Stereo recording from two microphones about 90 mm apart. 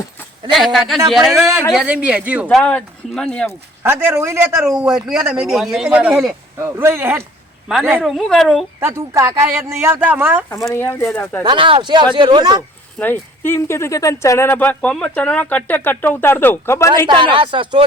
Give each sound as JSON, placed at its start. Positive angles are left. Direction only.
{"t": 0.5, "sound": "a man's voice", "side_deg": 0}
{"t": 1.8, "sound": "speech", "side_deg": -15}
{"t": 2.5, "sound": "speech", "side_deg": 10}
{"t": 3.8, "sound": "speech", "side_deg": -25}
{"t": 4.5, "sound": "speech", "side_deg": -10}
{"t": 6.6, "sound": "speech", "side_deg": -30}
{"t": 8.0, "sound": "a man's voice", "side_deg": 0}
{"t": 8.8, "sound": "speech", "side_deg": -35}
{"t": 10.8, "sound": "speech", "side_deg": 25}
{"t": 11.4, "sound": "speech", "side_deg": -70}
{"t": 13.0, "sound": "speech", "side_deg": 25}
{"t": 17.1, "sound": "speech", "side_deg": -65}